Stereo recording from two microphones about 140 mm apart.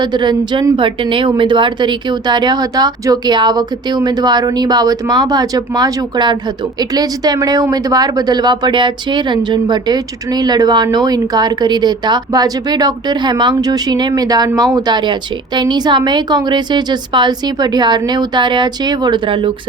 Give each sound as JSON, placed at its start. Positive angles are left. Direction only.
{"t": 0.0, "sound": "speech", "side_deg": -35}